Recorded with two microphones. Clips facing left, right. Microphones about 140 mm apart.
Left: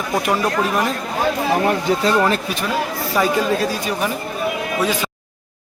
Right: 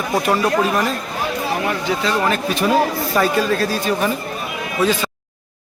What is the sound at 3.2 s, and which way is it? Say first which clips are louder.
Speech: even; 10° left (ahead or behind).